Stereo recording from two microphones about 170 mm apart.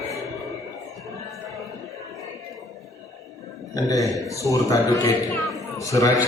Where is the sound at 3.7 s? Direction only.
20° left (ahead or behind).